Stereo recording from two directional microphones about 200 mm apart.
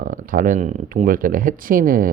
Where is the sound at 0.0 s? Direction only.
40° right (ahead or behind).